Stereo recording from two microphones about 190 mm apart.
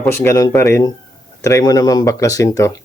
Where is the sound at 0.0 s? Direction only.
10° left (ahead or behind).